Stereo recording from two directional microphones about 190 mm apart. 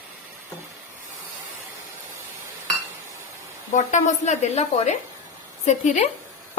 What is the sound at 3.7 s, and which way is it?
Speech, 40° left (ahead or behind).